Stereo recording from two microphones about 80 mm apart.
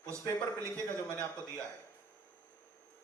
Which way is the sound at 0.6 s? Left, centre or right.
Right.